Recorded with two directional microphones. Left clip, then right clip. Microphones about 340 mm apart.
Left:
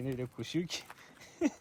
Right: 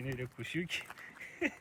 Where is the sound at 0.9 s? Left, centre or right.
Centre.